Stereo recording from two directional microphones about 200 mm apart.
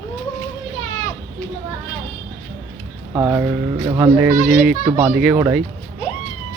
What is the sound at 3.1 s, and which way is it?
Speech, 10° right (ahead or behind).